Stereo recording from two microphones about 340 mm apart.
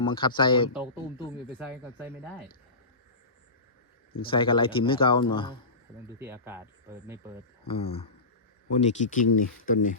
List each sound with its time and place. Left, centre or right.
0.0 s speech: centre
1.5 s speech: centre
4.3 s speech: centre
6.1 s speech: centre
7.7 s speech: centre